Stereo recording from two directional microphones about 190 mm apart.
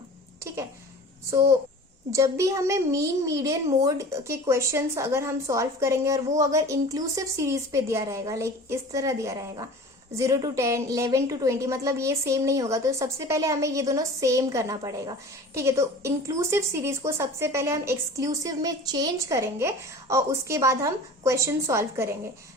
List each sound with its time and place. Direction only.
1.3 s a child's voice: 15° right (ahead or behind)